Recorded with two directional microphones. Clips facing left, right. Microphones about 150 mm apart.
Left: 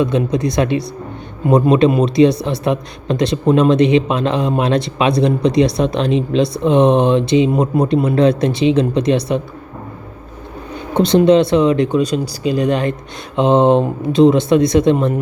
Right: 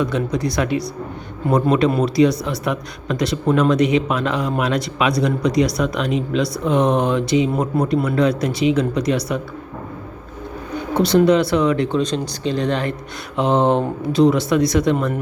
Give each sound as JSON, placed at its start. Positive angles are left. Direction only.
{"t": 0.0, "sound": "speech", "side_deg": 20}
{"t": 10.9, "sound": "speech", "side_deg": 25}